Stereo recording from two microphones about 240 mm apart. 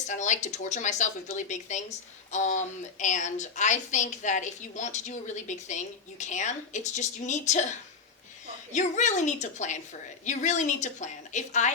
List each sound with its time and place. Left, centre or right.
0.1 s a woman's voice: left
8.7 s a woman's voice: left